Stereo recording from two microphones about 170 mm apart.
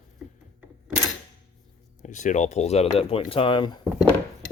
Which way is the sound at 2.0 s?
45° left (ahead or behind).